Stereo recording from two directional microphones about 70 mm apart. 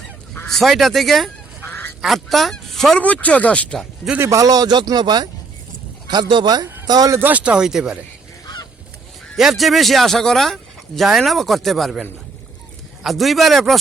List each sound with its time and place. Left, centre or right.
0.4 s speech: centre
1.6 s goose: left
2.0 s speech: centre
2.9 s speech: left
4.3 s speech: right
7.2 s speech: right; by 7.9 s centre
9.3 s speech: centre